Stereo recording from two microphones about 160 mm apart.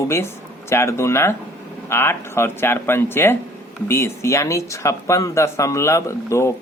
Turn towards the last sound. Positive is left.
turn(degrees=15)  # may be behind; listen again after turning